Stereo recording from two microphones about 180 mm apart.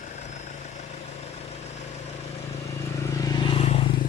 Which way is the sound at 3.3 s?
30° left (ahead or behind).